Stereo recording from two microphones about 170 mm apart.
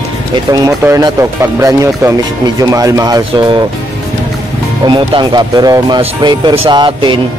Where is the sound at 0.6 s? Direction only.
20° right (ahead or behind).